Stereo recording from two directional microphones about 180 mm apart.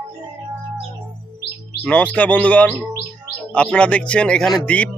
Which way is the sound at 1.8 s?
10° left (ahead or behind).